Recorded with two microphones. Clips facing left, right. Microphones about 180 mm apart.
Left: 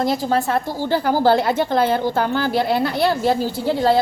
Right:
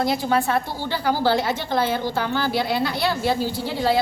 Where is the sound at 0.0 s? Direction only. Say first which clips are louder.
Left 2 dB; 40° left (ahead or behind).